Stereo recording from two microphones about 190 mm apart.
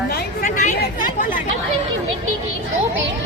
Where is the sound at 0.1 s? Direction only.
50° left (ahead or behind).